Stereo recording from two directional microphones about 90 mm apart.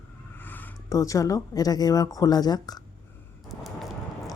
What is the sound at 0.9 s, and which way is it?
Speech, 35° left (ahead or behind).